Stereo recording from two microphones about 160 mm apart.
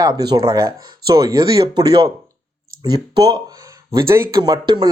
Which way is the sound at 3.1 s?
25° right (ahead or behind).